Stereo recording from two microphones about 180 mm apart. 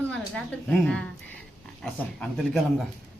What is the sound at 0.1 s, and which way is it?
Speech, 5° left (ahead or behind).